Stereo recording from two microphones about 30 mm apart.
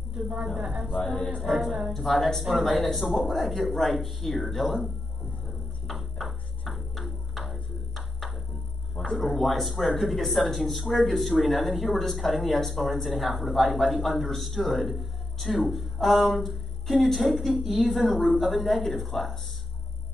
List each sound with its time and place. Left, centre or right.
0.1 s a woman's voice: centre
1.4 s a man's voice: centre
5.9 s a sound: centre
9.1 s a man's voice: centre